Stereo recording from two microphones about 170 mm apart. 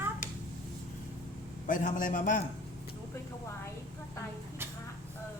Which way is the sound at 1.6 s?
50° left (ahead or behind).